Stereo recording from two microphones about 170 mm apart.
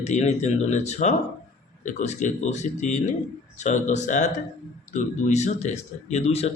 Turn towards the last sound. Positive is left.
turn(degrees=40)  # may be behind; listen again after turning